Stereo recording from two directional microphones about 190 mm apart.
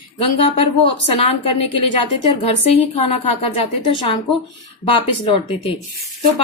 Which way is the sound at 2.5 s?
30° left (ahead or behind).